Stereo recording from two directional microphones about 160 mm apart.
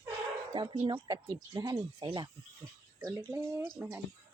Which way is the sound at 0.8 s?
25° right (ahead or behind).